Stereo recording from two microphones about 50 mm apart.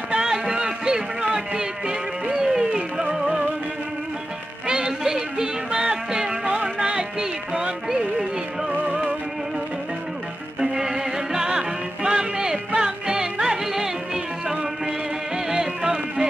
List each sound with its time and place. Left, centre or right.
0.1 s a sound: centre
4.6 s music: centre
10.6 s music: centre